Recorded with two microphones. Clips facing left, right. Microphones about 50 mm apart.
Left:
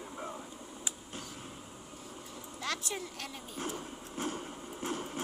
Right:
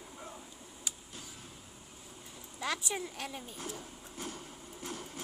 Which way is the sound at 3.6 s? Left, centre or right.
Left.